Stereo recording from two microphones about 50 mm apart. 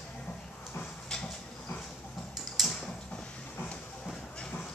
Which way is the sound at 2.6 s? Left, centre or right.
Centre.